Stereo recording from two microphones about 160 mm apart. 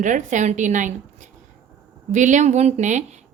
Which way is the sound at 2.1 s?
50° right (ahead or behind).